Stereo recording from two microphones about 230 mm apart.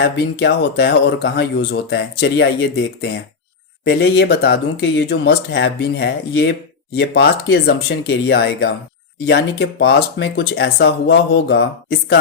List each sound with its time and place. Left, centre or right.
0.0 s speech: left